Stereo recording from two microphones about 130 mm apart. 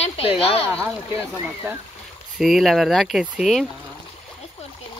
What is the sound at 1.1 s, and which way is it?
Speech, 15° right (ahead or behind).